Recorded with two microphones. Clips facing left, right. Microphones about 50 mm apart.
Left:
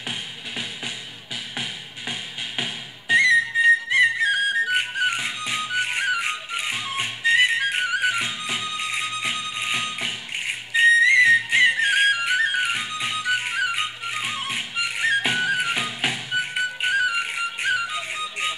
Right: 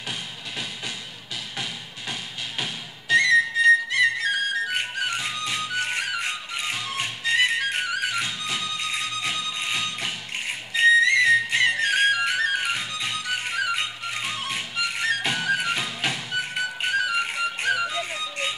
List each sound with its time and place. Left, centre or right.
2.6 s music: left
10.7 s whistle: left